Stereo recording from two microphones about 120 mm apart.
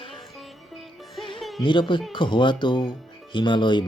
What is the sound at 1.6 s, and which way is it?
Speech, 40° left (ahead or behind).